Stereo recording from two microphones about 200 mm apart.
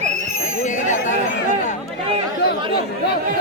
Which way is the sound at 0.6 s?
40° left (ahead or behind).